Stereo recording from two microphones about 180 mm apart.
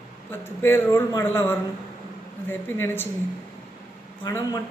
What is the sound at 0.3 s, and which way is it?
A man's voice, 10° left (ahead or behind).